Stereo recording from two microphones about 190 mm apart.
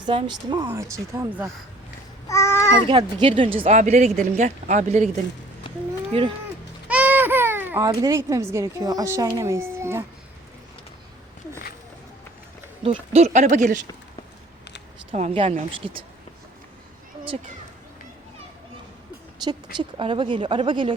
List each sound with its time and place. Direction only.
0.0 s speech: 25° right (ahead or behind)
2.2 s babbling: 15° left (ahead or behind)
2.8 s speech: 25° right (ahead or behind)
6.8 s baby cry: 10° right (ahead or behind)
7.9 s speech: 20° right (ahead or behind)
12.8 s speech: 30° right (ahead or behind)
15.1 s speech: 35° right (ahead or behind)
19.7 s speech: 25° right (ahead or behind)